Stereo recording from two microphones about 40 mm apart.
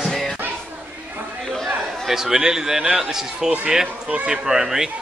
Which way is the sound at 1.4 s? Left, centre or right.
Centre.